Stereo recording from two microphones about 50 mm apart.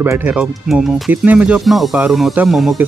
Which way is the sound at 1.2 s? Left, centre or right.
Right.